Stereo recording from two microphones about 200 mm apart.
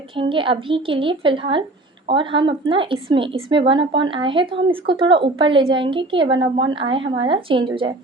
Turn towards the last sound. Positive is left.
turn(degrees=-25)  # may be behind; listen again after turning